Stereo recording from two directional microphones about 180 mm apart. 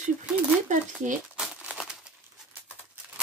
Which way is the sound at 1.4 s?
5° right (ahead or behind).